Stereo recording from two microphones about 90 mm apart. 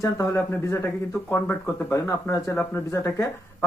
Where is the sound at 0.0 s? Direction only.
35° left (ahead or behind).